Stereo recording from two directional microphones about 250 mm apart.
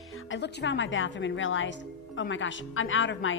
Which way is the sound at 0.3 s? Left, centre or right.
Left.